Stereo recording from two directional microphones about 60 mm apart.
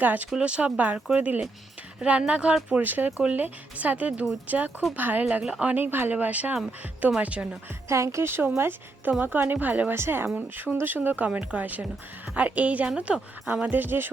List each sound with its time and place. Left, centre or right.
0.0 s speech: right
5.4 s speech: centre
5.7 s speech: right
7.9 s speech: right
9.9 s speech: right